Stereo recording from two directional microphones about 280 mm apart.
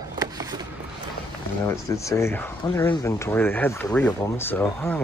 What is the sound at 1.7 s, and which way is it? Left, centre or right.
Speech, centre.